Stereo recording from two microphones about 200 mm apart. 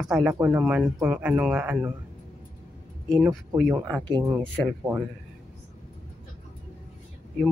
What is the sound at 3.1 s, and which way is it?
Speech, 5° right (ahead or behind).